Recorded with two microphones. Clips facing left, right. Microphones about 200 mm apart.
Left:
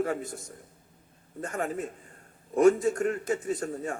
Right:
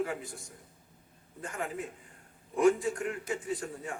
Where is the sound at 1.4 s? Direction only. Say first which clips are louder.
Left 5 dB; 45° left (ahead or behind).